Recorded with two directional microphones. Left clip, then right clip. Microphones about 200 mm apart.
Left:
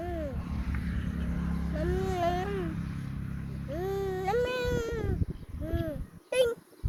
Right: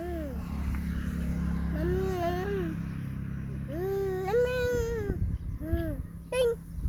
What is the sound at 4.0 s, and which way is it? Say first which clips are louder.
Humming: right 2 dB; 10° left (ahead or behind).